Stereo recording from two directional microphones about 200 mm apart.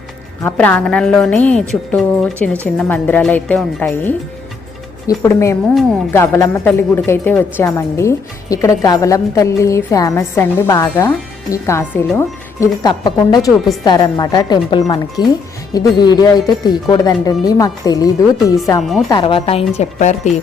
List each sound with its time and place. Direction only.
0.4 s a woman's voice: 10° left (ahead or behind)
18.8 s speech: centre (ahead or behind)
19.0 s speech: 25° left (ahead or behind)